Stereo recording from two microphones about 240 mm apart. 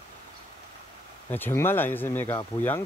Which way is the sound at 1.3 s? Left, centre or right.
Centre.